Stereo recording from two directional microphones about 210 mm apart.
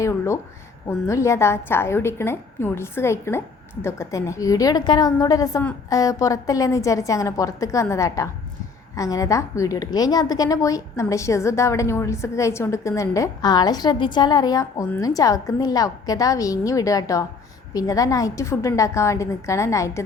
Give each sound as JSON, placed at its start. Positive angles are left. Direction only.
{"t": 0.0, "sound": "a woman's voice", "side_deg": 15}